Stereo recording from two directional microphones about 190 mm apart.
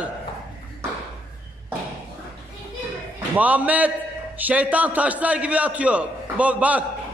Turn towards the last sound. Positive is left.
turn(degrees=-5)  # may be behind; listen again after turning